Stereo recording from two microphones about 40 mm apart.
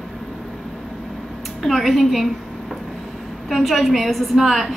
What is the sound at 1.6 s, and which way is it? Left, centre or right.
Speech, centre.